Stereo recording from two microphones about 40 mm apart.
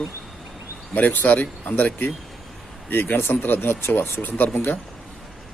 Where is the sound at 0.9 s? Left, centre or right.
Left.